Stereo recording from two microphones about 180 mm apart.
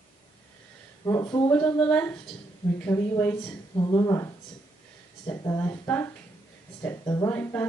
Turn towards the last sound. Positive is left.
turn(degrees=10)  # may be behind; listen again after turning